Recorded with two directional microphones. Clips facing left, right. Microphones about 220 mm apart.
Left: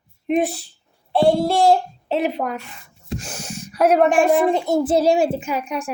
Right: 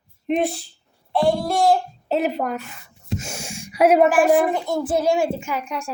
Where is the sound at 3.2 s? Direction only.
10° right (ahead or behind).